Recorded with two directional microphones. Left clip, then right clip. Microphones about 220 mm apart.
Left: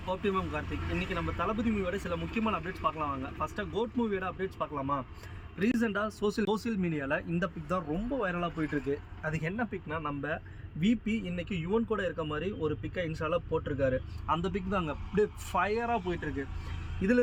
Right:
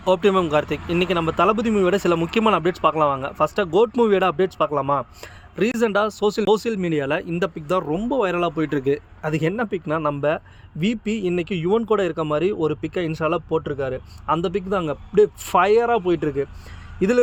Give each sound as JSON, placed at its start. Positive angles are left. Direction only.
{"t": 0.0, "sound": "speech", "side_deg": -45}